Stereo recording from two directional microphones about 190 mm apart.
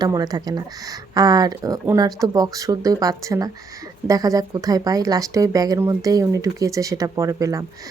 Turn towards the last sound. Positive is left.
turn(degrees=-15)  # may be behind; listen again after turning